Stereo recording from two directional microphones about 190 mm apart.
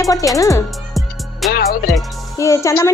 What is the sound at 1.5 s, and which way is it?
Music, 55° left (ahead or behind).